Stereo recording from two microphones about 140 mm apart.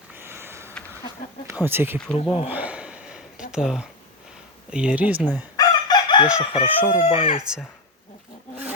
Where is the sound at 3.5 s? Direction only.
5° right (ahead or behind).